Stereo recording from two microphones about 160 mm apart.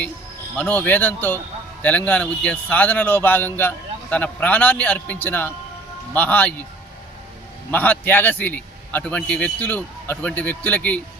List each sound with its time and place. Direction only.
0.5 s a man's voice: 5° left (ahead or behind)
7.7 s a man's voice: 10° left (ahead or behind)